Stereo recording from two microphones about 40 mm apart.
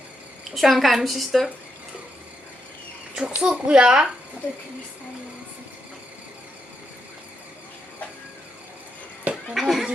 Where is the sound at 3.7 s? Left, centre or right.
Right.